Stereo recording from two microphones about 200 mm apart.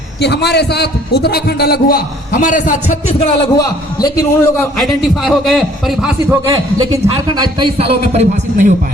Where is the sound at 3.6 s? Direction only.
20° left (ahead or behind).